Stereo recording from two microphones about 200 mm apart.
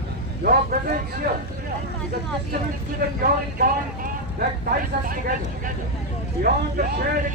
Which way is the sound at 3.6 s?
45° right (ahead or behind).